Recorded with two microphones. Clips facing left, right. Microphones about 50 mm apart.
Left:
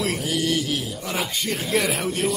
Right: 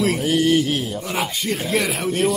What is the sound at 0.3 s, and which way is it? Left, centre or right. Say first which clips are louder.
Mantra: right 7 dB; right.